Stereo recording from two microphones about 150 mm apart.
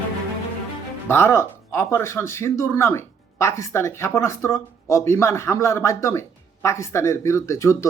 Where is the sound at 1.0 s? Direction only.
15° left (ahead or behind).